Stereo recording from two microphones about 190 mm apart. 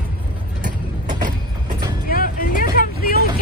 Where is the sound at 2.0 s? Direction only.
50° left (ahead or behind).